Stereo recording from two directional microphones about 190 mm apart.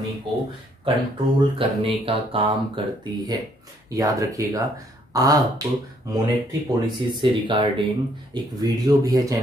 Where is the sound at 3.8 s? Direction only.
15° right (ahead or behind).